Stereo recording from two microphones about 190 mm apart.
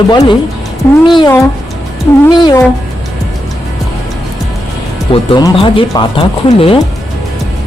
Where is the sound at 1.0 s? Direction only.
25° left (ahead or behind).